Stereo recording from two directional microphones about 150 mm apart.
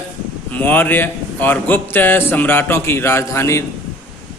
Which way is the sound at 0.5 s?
10° left (ahead or behind).